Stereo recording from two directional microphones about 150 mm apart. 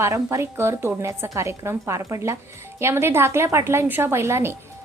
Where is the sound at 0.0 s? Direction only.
20° right (ahead or behind).